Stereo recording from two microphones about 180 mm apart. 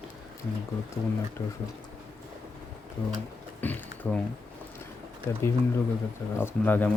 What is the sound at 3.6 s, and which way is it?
Typing, 10° left (ahead or behind).